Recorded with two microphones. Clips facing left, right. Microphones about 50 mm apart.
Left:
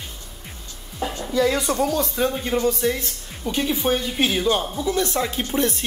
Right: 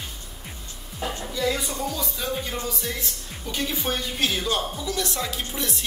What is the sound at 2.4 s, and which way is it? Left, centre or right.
Speech, left.